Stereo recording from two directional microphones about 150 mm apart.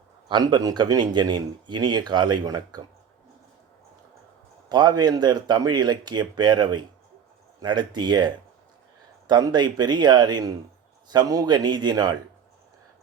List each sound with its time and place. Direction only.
0.3 s speech: 30° right (ahead or behind)
4.7 s speech: 30° right (ahead or behind)